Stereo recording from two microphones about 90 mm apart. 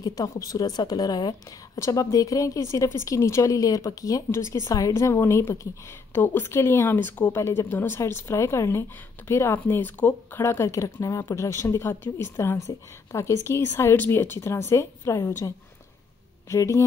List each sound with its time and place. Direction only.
0.0 s a woman's voice: 45° left (ahead or behind)
1.8 s speech: 35° left (ahead or behind); by 10.4 s 20° left (ahead or behind)
10.4 s speech: 35° left (ahead or behind)